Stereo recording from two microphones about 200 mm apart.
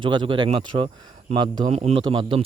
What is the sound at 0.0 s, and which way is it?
Speech, 25° right (ahead or behind).